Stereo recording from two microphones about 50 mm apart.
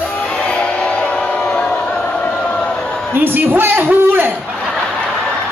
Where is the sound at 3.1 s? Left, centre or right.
Right.